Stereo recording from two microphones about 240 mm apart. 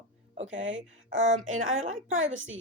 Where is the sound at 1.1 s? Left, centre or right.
Right.